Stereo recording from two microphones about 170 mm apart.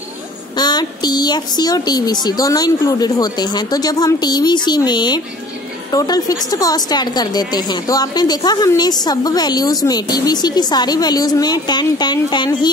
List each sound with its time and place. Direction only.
0.6 s a woman's voice: 25° left (ahead or behind)